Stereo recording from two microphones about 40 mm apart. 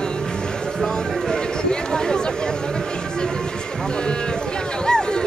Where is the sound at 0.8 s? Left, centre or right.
Centre.